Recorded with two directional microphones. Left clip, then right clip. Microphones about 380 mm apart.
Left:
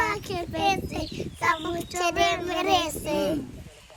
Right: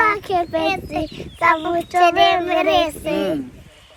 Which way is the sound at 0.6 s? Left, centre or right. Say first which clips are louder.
Right 4 dB; centre.